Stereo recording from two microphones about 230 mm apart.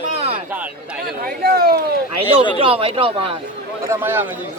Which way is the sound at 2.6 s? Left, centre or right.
Right.